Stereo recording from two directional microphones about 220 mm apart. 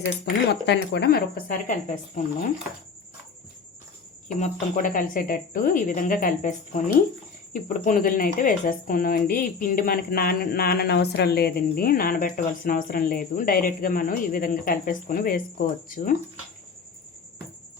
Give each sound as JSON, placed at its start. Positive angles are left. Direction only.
{"t": 0.6, "sound": "speech", "side_deg": 50}
{"t": 4.3, "sound": "speech", "side_deg": 35}